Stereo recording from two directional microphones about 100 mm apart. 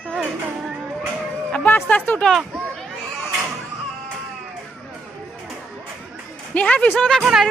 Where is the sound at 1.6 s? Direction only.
20° left (ahead or behind).